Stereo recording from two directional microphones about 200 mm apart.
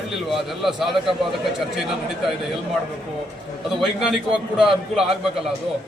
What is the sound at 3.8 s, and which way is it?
A man's voice, centre (ahead or behind).